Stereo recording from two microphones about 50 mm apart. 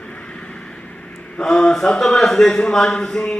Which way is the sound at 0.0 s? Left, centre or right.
Left.